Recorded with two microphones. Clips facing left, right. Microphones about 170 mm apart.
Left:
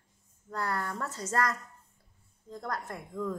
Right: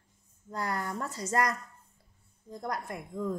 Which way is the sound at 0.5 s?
15° right (ahead or behind).